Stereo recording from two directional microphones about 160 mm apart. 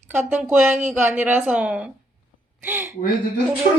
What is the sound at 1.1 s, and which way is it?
Speech, 10° right (ahead or behind).